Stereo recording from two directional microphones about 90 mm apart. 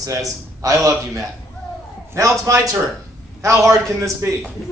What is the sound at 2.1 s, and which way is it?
A man's voice, 30° right (ahead or behind).